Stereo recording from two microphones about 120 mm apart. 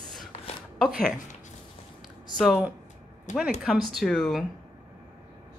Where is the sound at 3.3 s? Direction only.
90° left.